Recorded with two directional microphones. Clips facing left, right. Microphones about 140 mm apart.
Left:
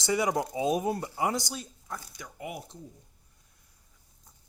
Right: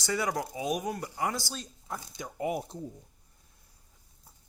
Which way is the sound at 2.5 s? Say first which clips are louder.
Right 8 dB; 40° right (ahead or behind).